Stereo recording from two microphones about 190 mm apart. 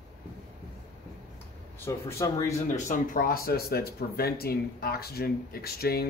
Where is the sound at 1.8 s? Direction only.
15° left (ahead or behind).